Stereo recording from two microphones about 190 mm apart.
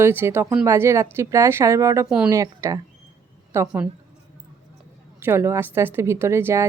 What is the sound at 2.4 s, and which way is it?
A woman's voice, 15° right (ahead or behind).